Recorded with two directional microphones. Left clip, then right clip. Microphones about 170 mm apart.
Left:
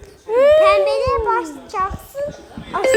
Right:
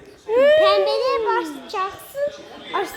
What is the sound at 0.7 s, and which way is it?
A child's voice, 25° right (ahead or behind).